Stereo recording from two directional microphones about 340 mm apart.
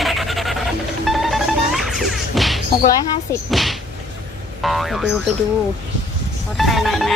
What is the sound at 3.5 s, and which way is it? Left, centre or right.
Speech, centre.